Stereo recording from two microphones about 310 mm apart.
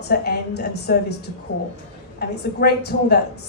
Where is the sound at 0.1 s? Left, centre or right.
Left.